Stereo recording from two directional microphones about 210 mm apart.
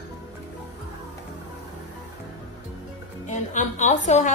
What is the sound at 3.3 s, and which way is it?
A woman's voice, 35° left (ahead or behind).